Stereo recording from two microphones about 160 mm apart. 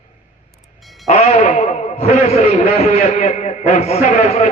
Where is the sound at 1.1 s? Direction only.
40° left (ahead or behind).